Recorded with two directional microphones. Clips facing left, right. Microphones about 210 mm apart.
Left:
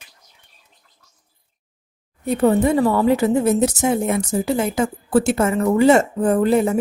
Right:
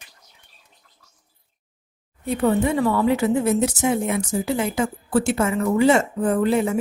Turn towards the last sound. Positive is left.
turn(degrees=40)  # may be behind; listen again after turning